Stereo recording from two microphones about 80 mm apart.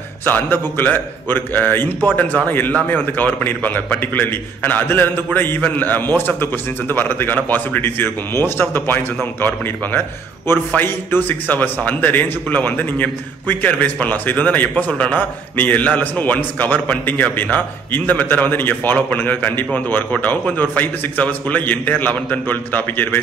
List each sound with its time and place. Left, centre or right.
0.2 s a man's voice: left